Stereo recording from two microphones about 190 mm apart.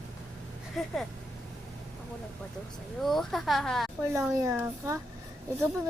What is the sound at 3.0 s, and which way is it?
Speech, centre (ahead or behind).